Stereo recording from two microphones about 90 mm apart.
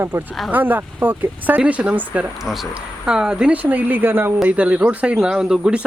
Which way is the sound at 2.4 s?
5° right (ahead or behind).